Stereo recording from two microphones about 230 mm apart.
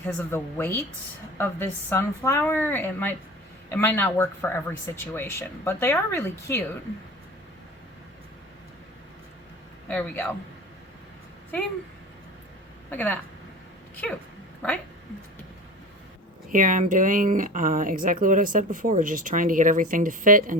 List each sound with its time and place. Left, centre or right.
0.0 s a woman's voice: centre
9.9 s a woman's voice: centre
12.9 s a woman's voice: centre
14.0 s dog: centre
16.5 s speech: right